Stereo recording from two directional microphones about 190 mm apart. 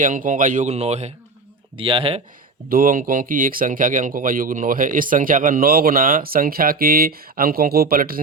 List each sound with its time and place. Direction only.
0.0 s speech: 45° right (ahead or behind)
2.6 s speech: 45° right (ahead or behind)